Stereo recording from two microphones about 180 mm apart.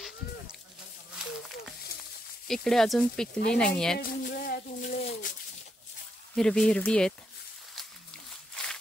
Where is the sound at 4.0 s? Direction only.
50° left (ahead or behind).